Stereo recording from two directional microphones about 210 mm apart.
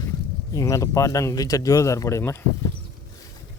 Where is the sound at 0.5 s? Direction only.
15° left (ahead or behind).